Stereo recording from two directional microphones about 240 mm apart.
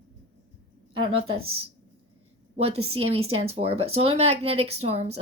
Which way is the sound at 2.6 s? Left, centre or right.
Right.